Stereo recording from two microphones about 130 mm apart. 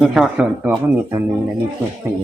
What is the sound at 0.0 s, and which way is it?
Speech, centre (ahead or behind).